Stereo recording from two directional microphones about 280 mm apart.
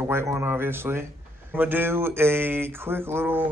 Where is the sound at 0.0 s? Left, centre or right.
Centre.